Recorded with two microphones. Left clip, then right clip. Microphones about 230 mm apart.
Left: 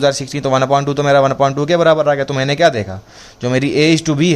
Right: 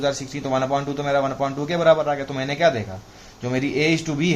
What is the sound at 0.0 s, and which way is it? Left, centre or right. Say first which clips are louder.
Speech: left 9 dB; left.